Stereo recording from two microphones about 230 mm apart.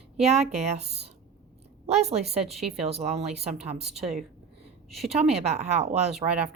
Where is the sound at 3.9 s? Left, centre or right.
Centre.